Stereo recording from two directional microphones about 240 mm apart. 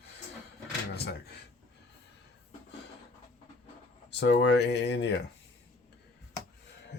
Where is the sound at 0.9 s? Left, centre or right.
Left.